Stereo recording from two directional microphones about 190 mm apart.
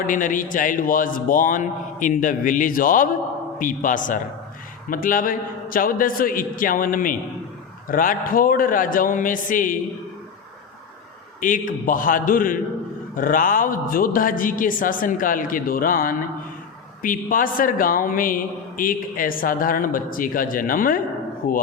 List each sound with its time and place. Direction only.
0.1 s a man's voice: 45° left (ahead or behind)
11.3 s a man's voice: 45° left (ahead or behind)